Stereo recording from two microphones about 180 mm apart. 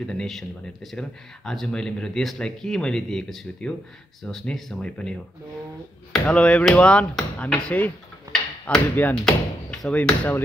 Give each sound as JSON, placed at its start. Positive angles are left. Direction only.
{"t": 0.0, "sound": "speech", "side_deg": 5}